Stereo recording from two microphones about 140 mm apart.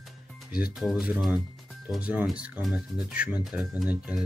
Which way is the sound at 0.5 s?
90° left.